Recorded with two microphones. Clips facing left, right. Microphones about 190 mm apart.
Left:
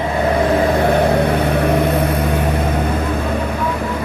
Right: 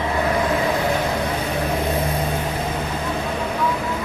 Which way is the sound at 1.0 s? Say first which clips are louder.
Left 8 dB; 65° left (ahead or behind).